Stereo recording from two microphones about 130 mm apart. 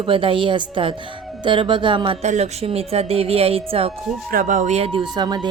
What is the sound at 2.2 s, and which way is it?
Speech, 60° right (ahead or behind).